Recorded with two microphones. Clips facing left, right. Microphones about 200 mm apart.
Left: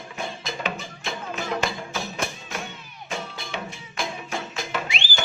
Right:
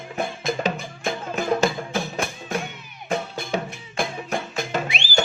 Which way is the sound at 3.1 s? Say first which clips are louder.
Right 7 dB; 55° right (ahead or behind).